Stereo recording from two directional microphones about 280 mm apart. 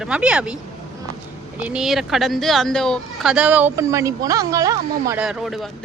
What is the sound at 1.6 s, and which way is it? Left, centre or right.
Speech, centre.